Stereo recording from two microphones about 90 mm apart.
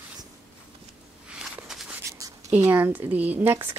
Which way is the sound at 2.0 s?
35° right (ahead or behind).